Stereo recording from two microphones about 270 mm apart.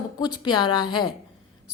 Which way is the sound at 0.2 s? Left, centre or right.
Centre.